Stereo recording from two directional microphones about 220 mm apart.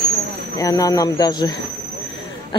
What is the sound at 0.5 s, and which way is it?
Speech, 15° left (ahead or behind).